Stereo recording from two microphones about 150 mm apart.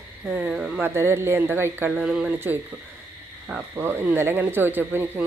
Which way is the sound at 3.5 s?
15° right (ahead or behind).